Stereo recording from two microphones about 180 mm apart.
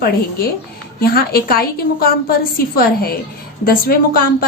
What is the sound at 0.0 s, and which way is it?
A woman's voice, 60° left (ahead or behind).